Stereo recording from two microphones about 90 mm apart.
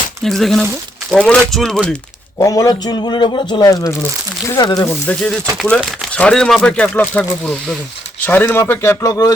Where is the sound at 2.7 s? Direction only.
50° left (ahead or behind).